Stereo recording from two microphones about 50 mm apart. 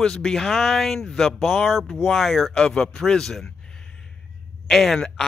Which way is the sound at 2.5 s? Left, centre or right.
Centre.